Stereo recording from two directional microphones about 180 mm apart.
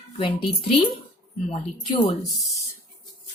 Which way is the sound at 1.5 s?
35° left (ahead or behind).